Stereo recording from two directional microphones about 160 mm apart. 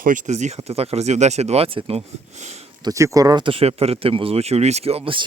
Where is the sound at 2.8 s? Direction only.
20° right (ahead or behind).